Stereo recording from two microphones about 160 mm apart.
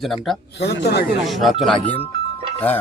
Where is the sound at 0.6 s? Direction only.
90° left.